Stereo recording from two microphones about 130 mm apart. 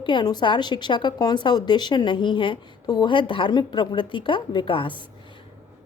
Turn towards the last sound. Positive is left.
turn(degrees=40)  # may be behind; listen again after turning